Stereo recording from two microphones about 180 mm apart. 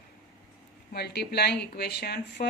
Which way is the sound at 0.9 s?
65° left (ahead or behind).